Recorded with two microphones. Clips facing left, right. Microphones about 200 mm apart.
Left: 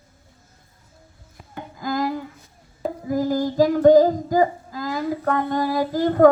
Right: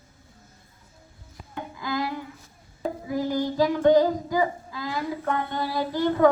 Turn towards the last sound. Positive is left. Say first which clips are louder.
# left 5 dB
turn(degrees=45)  # may be behind; listen again after turning